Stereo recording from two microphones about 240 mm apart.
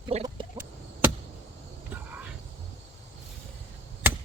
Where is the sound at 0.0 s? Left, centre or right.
Right.